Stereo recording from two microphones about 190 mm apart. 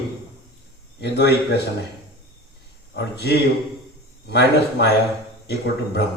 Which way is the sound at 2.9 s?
60° left (ahead or behind).